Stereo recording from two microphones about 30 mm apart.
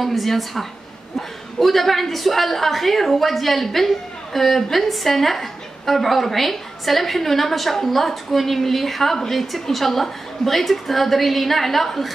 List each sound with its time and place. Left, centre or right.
0.0 s a woman's voice: centre